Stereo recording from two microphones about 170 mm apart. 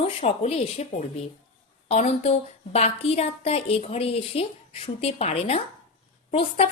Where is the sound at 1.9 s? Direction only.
40° left (ahead or behind).